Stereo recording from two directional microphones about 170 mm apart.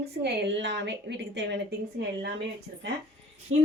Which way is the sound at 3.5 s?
35° right (ahead or behind).